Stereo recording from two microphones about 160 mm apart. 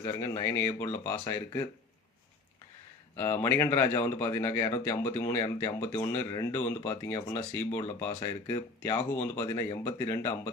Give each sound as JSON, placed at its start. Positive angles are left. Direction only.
{"t": 0.0, "sound": "speech", "side_deg": 20}
{"t": 3.2, "sound": "speech", "side_deg": 15}